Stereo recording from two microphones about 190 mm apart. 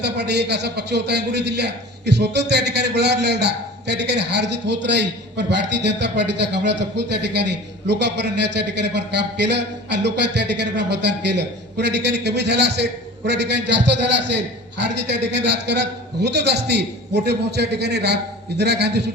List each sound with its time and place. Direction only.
0.0 s a man's voice: 60° right (ahead or behind)